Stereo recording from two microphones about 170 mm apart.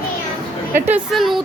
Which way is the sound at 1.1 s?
Centre (ahead or behind).